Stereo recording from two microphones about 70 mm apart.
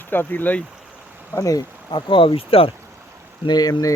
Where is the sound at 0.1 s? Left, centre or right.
Left.